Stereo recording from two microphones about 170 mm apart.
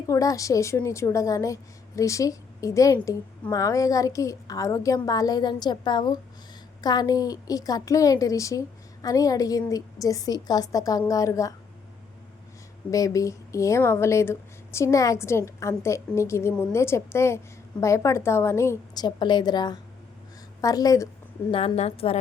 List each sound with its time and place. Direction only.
0.1 s a woman's voice: 20° left (ahead or behind)
12.9 s a woman's voice: 20° left (ahead or behind)
21.5 s a woman's voice: 35° left (ahead or behind)